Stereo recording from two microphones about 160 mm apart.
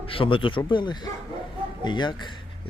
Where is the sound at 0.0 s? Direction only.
35° left (ahead or behind).